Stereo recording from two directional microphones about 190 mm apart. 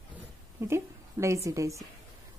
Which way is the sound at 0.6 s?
15° right (ahead or behind).